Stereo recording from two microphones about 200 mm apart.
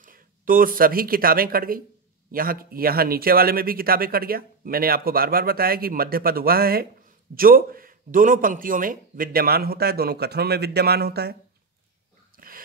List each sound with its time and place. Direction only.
0.0 s speech: 45° right (ahead or behind)
12.4 s dog: 45° right (ahead or behind)